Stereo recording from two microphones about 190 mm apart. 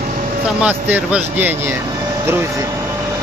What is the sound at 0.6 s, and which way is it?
Speech, 5° right (ahead or behind).